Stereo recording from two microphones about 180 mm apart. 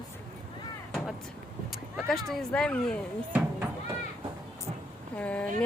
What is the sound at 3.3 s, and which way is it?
Chop, 10° right (ahead or behind).